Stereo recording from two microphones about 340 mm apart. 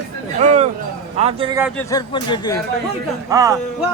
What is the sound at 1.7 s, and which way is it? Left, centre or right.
Speech, centre.